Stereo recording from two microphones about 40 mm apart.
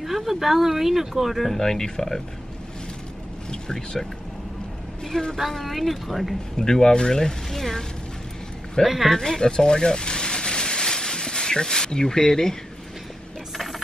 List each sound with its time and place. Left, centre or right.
0.0 s speech: centre
1.6 s speech: centre
3.4 s speech: centre
5.3 s speech: centre
6.5 s speech: centre
8.8 s speech: centre
9.1 s a sound: centre